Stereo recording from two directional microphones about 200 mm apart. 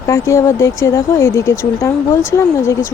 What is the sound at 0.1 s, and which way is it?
A woman's voice, 15° left (ahead or behind).